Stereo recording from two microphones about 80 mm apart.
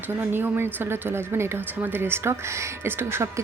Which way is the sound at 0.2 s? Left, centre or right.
Right.